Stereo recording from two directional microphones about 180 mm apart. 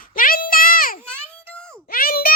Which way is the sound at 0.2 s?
50° left (ahead or behind).